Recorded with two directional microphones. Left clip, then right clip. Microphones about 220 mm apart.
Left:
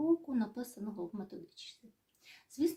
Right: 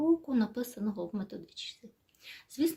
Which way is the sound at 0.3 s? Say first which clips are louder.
Right 6 dB; 30° right (ahead or behind).